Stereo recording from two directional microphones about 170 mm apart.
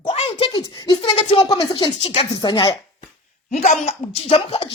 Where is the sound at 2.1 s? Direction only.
35° left (ahead or behind).